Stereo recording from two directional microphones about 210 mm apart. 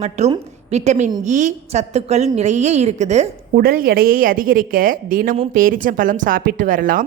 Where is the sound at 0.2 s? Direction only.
30° right (ahead or behind).